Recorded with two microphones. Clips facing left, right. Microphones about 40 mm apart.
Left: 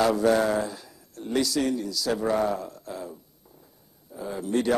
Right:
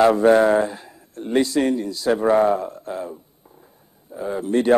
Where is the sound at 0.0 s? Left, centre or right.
Right.